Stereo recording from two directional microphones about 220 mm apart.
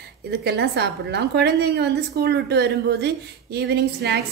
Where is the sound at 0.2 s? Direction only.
50° right (ahead or behind).